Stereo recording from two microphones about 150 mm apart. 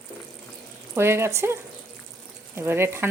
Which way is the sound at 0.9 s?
15° right (ahead or behind).